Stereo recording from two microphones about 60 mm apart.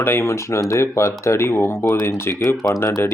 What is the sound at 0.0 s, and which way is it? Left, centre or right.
Speech, left.